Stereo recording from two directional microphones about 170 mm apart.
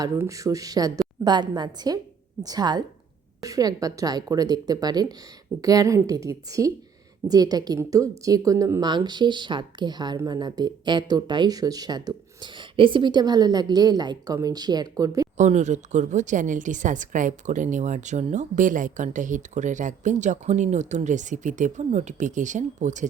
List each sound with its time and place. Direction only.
0.0 s speech: 20° right (ahead or behind)
15.4 s a woman's voice: 45° right (ahead or behind)